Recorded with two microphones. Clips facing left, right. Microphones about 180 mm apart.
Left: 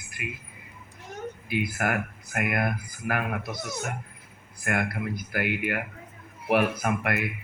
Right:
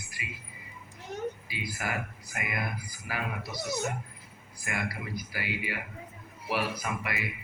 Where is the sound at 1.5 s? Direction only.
55° left (ahead or behind).